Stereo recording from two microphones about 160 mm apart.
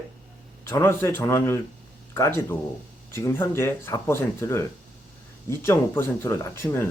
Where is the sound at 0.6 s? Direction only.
15° left (ahead or behind).